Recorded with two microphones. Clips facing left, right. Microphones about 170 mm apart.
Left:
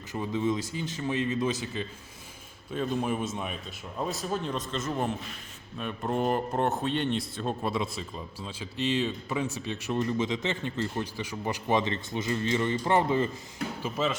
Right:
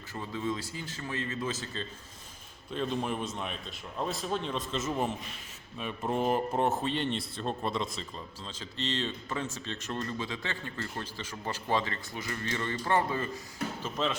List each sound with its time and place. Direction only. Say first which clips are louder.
0.1 s a man's voice: left 6 dB; 20° left (ahead or behind)
13.8 s speech: left 3 dB; 5° left (ahead or behind)